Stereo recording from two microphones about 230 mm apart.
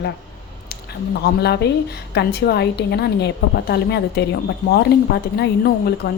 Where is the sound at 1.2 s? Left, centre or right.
Left.